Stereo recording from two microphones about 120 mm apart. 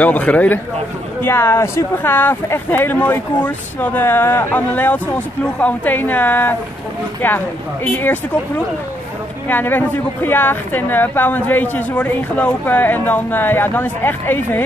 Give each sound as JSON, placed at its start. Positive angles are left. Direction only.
{"t": 0.0, "sound": "speech", "side_deg": 15}
{"t": 9.5, "sound": "speech", "side_deg": 15}